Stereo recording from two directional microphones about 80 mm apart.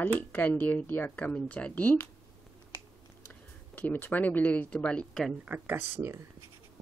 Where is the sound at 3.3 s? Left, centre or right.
Left.